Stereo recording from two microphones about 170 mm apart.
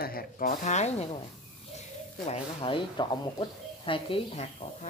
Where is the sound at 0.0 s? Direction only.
60° left (ahead or behind); by 1.0 s 40° left (ahead or behind).